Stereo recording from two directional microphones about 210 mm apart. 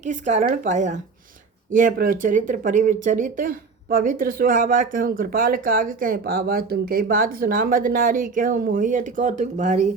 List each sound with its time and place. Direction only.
0.0 s speech: 35° right (ahead or behind)